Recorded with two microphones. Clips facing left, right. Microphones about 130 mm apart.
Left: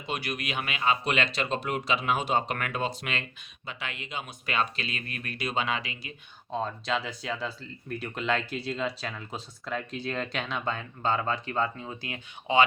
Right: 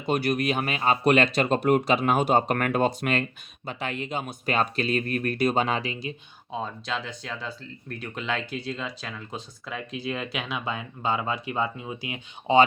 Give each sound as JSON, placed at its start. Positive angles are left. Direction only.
{"t": 0.0, "sound": "speech", "side_deg": -45}
{"t": 6.5, "sound": "speech", "side_deg": 0}